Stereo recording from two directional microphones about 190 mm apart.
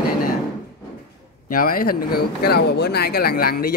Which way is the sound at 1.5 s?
50° left (ahead or behind).